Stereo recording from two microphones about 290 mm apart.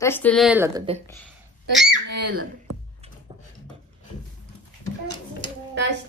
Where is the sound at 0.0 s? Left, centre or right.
Centre.